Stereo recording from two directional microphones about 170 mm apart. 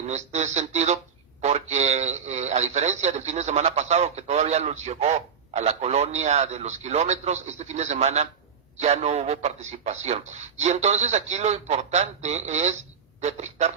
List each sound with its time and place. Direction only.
0.1 s a man's voice: 40° right (ahead or behind)